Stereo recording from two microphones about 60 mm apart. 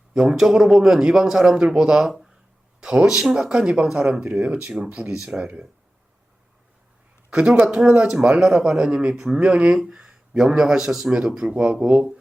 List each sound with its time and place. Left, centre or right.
0.1 s speech: centre
7.3 s speech: centre
7.9 s speech: centre